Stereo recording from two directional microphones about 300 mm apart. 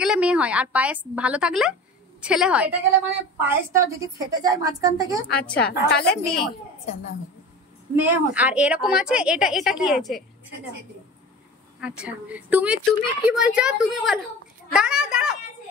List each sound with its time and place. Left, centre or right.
0.0 s a woman's voice: centre
5.7 s a woman's voice: left
7.9 s a woman's voice: centre
11.8 s a woman's voice: centre